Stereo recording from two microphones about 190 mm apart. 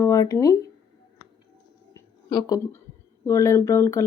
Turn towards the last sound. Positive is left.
turn(degrees=15)  # may be behind; listen again after turning